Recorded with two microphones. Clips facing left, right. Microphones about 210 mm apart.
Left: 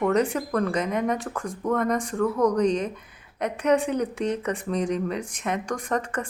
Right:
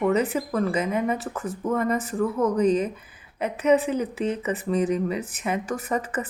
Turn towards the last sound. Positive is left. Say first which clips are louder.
# even
turn(degrees=-5)  # may be behind; listen again after turning